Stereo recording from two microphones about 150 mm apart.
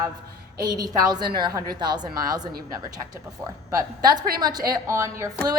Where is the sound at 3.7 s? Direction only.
25° right (ahead or behind).